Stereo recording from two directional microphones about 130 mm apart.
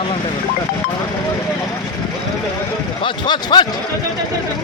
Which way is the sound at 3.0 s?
35° left (ahead or behind).